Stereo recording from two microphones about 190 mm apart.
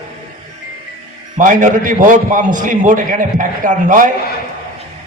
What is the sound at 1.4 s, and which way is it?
A man's voice, 45° right (ahead or behind).